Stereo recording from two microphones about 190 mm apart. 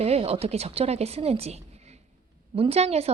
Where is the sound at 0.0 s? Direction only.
30° right (ahead or behind).